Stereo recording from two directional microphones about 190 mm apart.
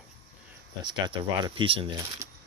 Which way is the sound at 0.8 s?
25° right (ahead or behind).